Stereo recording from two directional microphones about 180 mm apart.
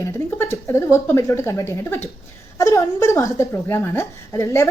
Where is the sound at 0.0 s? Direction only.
15° left (ahead or behind).